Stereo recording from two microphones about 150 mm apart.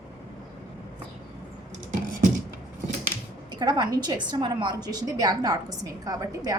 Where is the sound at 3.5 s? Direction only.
30° right (ahead or behind).